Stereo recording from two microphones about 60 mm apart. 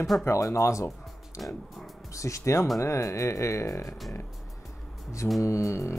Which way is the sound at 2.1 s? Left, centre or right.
Left.